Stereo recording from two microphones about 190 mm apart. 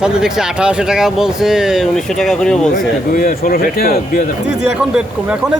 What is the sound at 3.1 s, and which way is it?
Speech, 45° left (ahead or behind).